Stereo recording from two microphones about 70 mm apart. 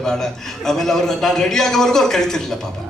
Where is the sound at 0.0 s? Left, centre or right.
Centre.